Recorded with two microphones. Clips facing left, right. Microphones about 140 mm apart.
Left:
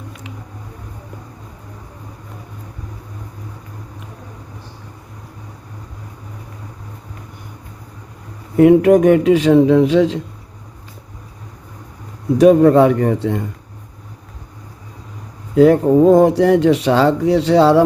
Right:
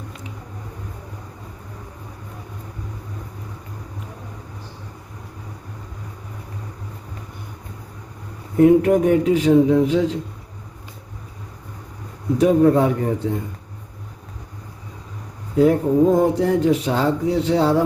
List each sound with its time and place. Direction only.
8.5 s speech: 80° left
12.4 s speech: 85° left
15.5 s speech: 85° left